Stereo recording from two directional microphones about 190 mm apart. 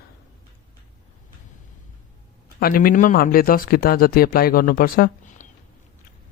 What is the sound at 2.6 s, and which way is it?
Speech, 50° left (ahead or behind).